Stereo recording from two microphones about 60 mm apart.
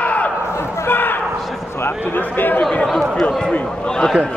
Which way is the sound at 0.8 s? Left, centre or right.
Left.